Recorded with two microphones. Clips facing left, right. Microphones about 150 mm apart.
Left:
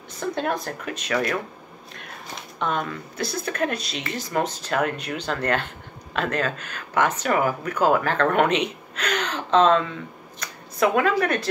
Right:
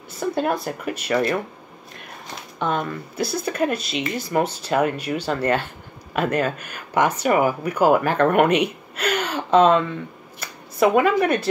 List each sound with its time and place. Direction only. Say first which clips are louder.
0.2 s speech: right 3 dB; 5° right (ahead or behind)
2.6 s speech: right 2 dB; 5° right (ahead or behind)